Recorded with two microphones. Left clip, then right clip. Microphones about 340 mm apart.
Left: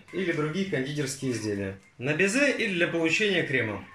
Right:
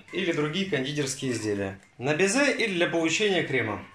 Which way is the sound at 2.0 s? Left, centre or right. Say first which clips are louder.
Right 1 dB; centre.